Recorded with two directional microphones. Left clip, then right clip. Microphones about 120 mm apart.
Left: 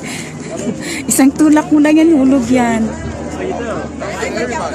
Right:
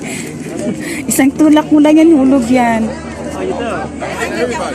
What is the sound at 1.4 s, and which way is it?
Speech, 20° left (ahead or behind).